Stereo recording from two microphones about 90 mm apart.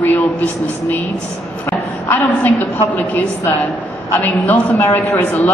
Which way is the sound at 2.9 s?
15° left (ahead or behind).